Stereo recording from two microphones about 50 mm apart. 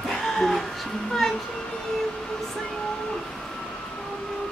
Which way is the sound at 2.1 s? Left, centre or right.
Centre.